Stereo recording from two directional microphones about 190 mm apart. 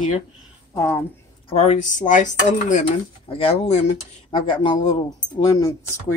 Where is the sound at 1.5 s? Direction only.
35° left (ahead or behind).